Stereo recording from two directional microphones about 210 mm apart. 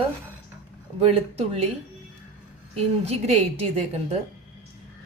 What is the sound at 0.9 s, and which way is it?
Speech, 30° right (ahead or behind).